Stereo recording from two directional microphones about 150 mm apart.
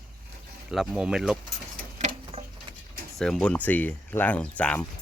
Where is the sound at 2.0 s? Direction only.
45° right (ahead or behind).